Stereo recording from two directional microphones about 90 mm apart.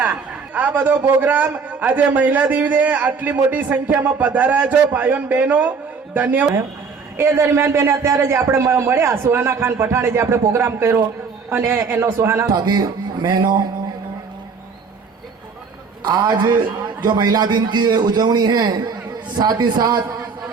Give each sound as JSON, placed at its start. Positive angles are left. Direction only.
{"t": 0.5, "sound": "a man's voice", "side_deg": -15}
{"t": 7.2, "sound": "a man's voice", "side_deg": -30}
{"t": 12.5, "sound": "a man's voice", "side_deg": -45}
{"t": 16.0, "sound": "a man's voice", "side_deg": -50}